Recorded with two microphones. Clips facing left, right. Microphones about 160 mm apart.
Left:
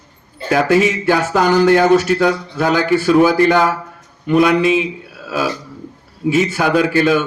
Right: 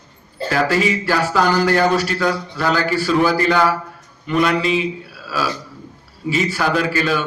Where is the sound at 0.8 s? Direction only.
55° left (ahead or behind).